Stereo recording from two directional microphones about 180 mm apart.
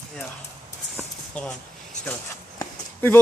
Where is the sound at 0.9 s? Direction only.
5° left (ahead or behind).